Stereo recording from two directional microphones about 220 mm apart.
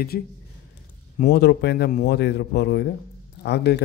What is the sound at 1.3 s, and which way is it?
Speech, 50° left (ahead or behind).